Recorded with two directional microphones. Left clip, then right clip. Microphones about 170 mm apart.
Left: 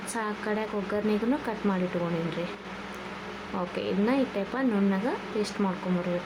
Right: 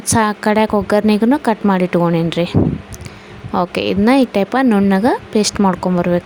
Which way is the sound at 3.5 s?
65° right (ahead or behind).